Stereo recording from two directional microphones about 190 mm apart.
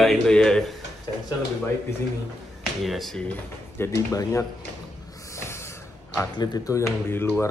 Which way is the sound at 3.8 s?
15° left (ahead or behind).